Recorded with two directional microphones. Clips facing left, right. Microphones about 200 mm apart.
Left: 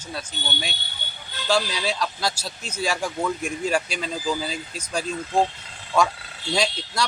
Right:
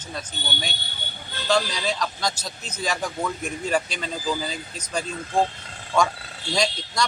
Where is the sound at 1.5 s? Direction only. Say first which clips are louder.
Even; 5° left (ahead or behind).